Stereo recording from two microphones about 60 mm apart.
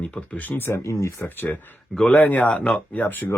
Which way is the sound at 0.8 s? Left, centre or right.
Left.